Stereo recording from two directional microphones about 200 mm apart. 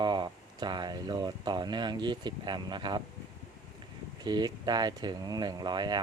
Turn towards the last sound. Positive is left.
turn(degrees=-20)  # may be behind; listen again after turning